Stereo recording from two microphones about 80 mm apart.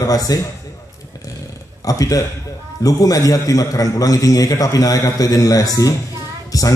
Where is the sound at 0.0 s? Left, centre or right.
Left.